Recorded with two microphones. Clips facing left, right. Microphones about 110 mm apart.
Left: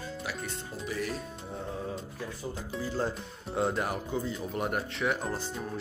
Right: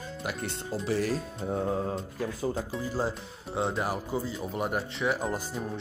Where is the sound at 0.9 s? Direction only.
35° right (ahead or behind).